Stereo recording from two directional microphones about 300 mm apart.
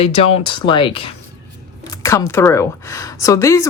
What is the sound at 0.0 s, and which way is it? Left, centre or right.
A woman's voice, centre.